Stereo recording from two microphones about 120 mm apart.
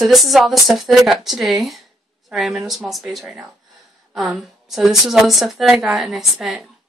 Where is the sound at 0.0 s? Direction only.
Centre (ahead or behind).